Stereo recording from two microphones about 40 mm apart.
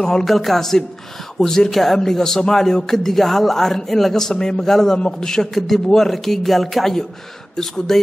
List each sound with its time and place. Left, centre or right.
0.0 s a man's voice: centre
0.3 s a man's voice: centre